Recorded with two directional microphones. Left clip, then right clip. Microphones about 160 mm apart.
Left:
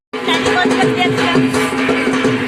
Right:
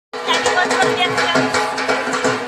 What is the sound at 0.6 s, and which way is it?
Music, 40° left (ahead or behind).